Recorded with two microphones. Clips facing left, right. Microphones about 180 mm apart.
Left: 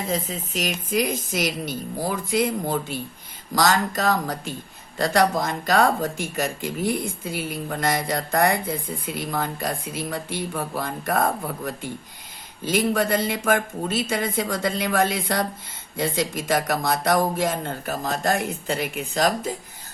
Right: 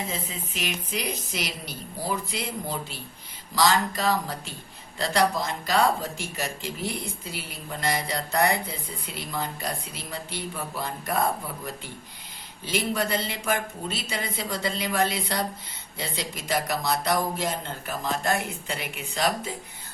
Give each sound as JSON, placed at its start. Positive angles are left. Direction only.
{"t": 0.1, "sound": "speech", "side_deg": 40}